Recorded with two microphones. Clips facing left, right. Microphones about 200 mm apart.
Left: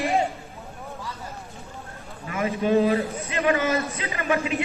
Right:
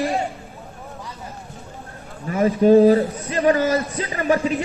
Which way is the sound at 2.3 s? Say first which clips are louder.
Right 8 dB; 35° right (ahead or behind).